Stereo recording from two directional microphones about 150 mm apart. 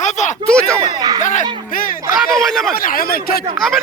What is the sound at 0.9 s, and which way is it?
Speech, 25° right (ahead or behind).